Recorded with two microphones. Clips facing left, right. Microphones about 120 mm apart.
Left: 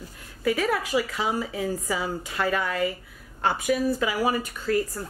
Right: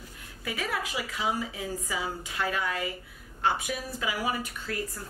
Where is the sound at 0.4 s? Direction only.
45° left (ahead or behind).